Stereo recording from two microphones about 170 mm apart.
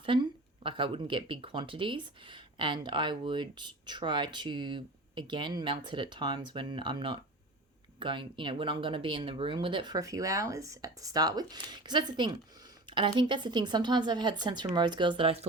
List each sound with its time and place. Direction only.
0.0 s speech: 30° right (ahead or behind)